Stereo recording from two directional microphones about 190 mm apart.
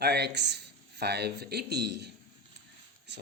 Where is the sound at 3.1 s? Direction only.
65° right (ahead or behind).